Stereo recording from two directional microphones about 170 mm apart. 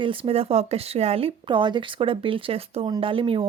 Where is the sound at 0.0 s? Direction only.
30° right (ahead or behind).